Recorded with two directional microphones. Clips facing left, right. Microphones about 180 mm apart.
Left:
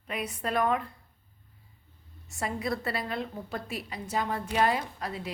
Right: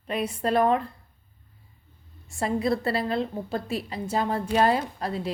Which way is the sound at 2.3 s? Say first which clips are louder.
Right 7 dB; 30° right (ahead or behind).